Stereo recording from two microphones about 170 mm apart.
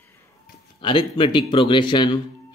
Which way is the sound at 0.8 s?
30° left (ahead or behind).